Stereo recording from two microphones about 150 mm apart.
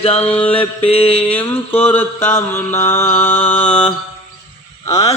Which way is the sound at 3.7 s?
40° left (ahead or behind).